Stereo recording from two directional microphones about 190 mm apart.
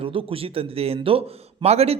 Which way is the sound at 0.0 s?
30° right (ahead or behind).